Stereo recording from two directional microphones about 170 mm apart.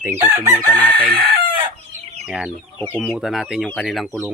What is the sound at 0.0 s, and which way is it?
Speech, 15° right (ahead or behind).